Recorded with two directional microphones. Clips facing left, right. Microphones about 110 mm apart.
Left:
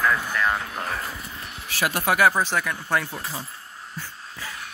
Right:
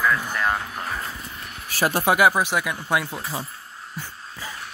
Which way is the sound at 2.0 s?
15° right (ahead or behind).